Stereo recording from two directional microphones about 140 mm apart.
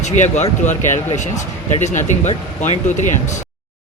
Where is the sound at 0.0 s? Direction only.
55° left (ahead or behind).